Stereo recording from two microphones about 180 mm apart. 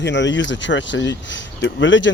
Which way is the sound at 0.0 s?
75° left (ahead or behind).